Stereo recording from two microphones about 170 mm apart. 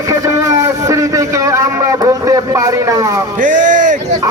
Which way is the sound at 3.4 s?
45° right (ahead or behind).